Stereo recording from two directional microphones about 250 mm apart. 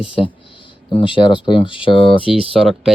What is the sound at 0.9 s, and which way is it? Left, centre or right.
Speech, centre.